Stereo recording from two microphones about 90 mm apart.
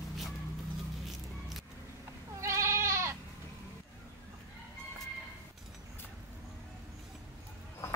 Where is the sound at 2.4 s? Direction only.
30° right (ahead or behind).